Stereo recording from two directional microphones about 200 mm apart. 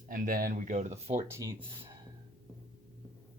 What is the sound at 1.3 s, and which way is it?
Speech, 15° right (ahead or behind).